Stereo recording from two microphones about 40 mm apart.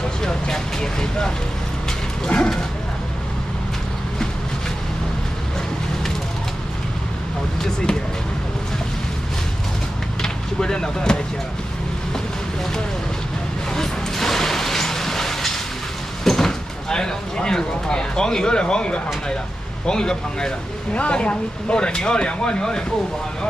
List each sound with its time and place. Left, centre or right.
0.2 s vehicle: centre
2.2 s speech: centre
10.2 s a sound: centre
13.7 s music: centre
16.3 s speech: centre
20.9 s speech: left